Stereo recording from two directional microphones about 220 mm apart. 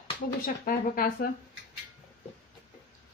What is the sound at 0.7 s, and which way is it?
Speech, 40° left (ahead or behind).